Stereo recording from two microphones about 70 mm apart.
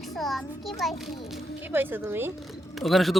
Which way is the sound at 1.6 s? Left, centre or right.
Right.